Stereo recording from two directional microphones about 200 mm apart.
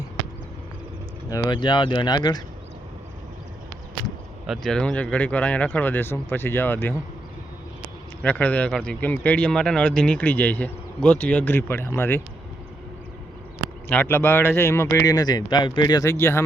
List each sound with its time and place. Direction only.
1.3 s speech: 20° left (ahead or behind)
4.4 s speech: centre (ahead or behind)
8.2 s speech: 5° left (ahead or behind)
13.8 s speech: 10° left (ahead or behind)